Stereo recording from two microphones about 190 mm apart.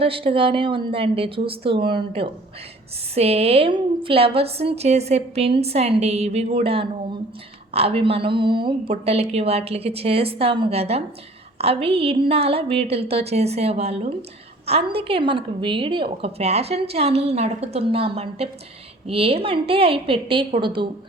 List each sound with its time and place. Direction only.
0.0 s a woman's voice: 30° right (ahead or behind)